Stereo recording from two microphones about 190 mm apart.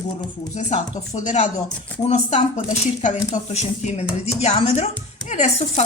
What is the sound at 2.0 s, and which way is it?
Speech, 35° left (ahead or behind).